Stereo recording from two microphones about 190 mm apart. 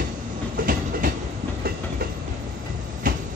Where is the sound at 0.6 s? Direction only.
50° right (ahead or behind).